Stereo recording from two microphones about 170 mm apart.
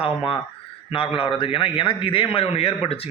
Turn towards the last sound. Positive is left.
turn(degrees=35)  # may be behind; listen again after turning